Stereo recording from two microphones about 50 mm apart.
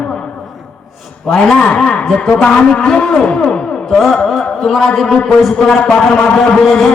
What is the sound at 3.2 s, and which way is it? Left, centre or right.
Music, centre.